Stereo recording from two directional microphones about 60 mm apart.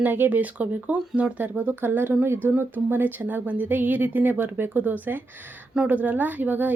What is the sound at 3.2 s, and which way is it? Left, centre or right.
Speech, right.